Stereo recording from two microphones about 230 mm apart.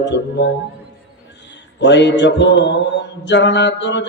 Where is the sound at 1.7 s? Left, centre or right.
Left.